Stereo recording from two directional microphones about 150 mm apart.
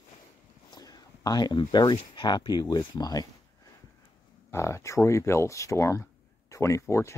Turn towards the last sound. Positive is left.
turn(degrees=20)  # may be behind; listen again after turning